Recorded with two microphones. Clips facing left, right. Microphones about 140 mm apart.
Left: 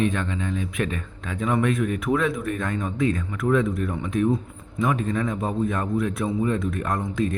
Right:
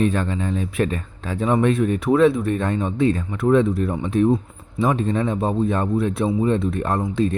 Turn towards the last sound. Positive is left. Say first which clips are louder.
# right 4 dB
turn(degrees=-30)  # may be behind; listen again after turning